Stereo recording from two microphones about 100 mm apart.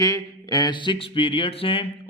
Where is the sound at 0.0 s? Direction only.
40° left (ahead or behind).